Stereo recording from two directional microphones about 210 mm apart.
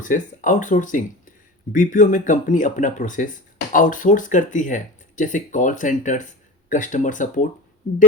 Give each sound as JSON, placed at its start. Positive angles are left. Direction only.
{"t": 0.0, "sound": "speech", "side_deg": 40}